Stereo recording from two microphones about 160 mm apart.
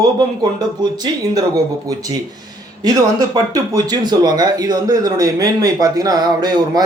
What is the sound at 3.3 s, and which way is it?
Speech, 25° right (ahead or behind).